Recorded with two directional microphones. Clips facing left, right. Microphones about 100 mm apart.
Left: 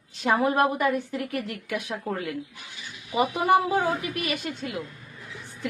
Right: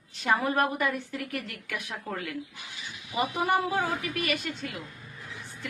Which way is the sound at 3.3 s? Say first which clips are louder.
Left 5 dB; 15° left (ahead or behind).